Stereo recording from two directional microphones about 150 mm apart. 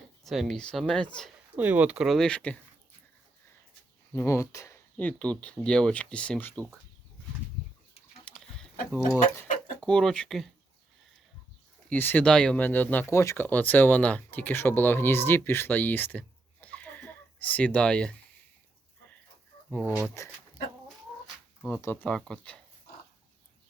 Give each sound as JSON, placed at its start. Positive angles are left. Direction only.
{"t": 0.3, "sound": "speech", "side_deg": 0}
{"t": 1.5, "sound": "speech", "side_deg": -10}
{"t": 4.1, "sound": "speech", "side_deg": 20}
{"t": 4.9, "sound": "speech", "side_deg": 10}
{"t": 8.2, "sound": "pig", "side_deg": 5}
{"t": 9.8, "sound": "speech", "side_deg": 5}
{"t": 11.9, "sound": "speech", "side_deg": 10}
{"t": 20.1, "sound": "speech", "side_deg": 20}
{"t": 21.7, "sound": "speech", "side_deg": 15}